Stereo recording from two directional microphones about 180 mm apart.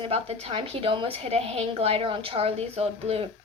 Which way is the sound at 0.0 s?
35° right (ahead or behind).